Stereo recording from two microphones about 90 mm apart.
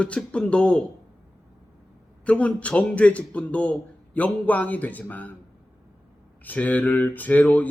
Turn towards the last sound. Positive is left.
turn(degrees=20)  # may be behind; listen again after turning